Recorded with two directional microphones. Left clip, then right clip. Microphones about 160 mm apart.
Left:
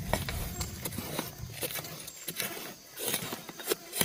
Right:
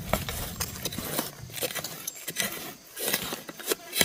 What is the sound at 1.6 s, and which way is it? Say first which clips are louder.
Keys jangling: right 5 dB; 90° right.